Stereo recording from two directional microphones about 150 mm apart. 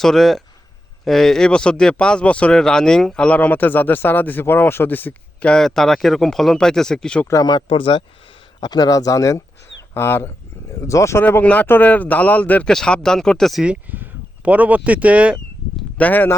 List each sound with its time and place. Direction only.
0.0 s speech: centre (ahead or behind)
7.3 s speech: 25° left (ahead or behind); by 15.8 s 10° right (ahead or behind)
16.0 s speech: 10° left (ahead or behind)